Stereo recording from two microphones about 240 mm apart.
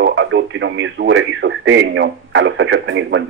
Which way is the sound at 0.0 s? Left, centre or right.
Right.